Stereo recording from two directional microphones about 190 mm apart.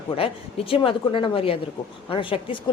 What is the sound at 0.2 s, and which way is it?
Speech, 30° left (ahead or behind).